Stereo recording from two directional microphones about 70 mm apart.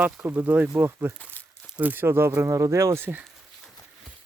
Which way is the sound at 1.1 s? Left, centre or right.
Left.